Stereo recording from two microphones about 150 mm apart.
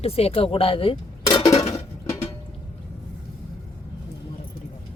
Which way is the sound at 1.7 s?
20° left (ahead or behind).